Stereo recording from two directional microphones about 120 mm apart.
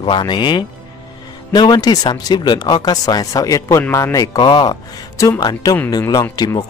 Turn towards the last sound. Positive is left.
turn(degrees=30)  # may be behind; listen again after turning